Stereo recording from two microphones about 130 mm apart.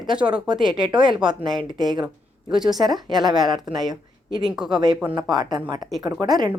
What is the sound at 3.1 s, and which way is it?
Speech, 30° right (ahead or behind).